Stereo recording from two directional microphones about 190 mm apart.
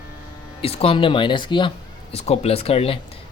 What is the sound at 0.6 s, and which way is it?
Speech, 30° left (ahead or behind).